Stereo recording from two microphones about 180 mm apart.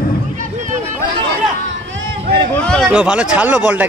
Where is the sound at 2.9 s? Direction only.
5° right (ahead or behind).